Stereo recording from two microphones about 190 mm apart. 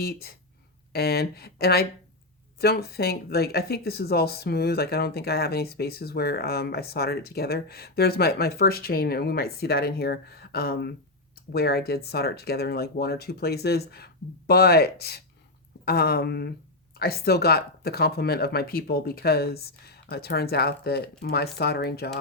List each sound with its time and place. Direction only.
0.0 s speech: 55° left (ahead or behind)